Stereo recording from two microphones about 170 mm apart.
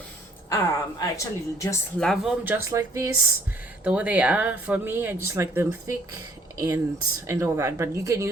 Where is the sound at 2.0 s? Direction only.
Centre (ahead or behind); by 3.1 s 20° right (ahead or behind).